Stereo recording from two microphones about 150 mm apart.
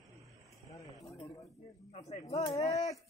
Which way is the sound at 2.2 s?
45° left (ahead or behind).